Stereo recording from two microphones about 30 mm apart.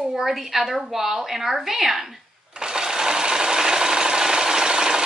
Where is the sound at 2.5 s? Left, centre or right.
Right.